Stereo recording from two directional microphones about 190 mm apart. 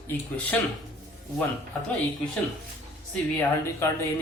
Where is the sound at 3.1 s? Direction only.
10° left (ahead or behind).